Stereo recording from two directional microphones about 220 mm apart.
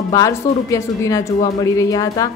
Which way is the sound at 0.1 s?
15° left (ahead or behind).